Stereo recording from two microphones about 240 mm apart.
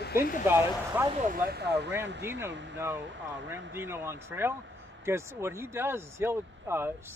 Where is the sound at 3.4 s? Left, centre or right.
Centre.